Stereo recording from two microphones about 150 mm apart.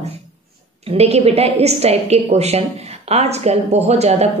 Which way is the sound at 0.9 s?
45° right (ahead or behind).